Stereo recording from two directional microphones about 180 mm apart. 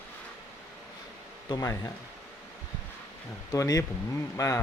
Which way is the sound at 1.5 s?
20° left (ahead or behind).